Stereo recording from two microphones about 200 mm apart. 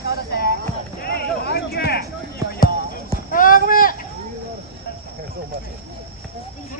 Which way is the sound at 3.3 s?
45° left (ahead or behind).